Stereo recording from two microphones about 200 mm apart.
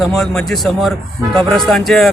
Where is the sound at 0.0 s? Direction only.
Centre (ahead or behind).